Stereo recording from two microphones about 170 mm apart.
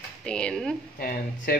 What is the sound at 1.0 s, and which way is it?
Speech, 60° left (ahead or behind).